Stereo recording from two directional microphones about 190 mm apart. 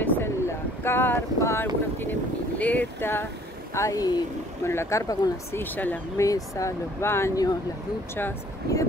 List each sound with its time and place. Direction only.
0.0 s vehicle: 15° left (ahead or behind)
2.6 s speech: 10° left (ahead or behind)